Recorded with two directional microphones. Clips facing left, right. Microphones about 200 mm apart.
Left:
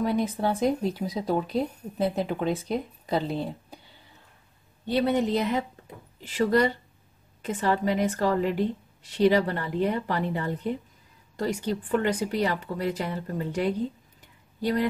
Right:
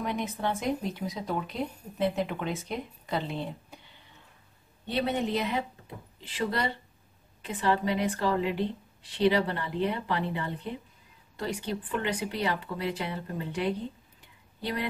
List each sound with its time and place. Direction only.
0.0 s speech: 35° left (ahead or behind)
4.8 s a woman's voice: 40° left (ahead or behind)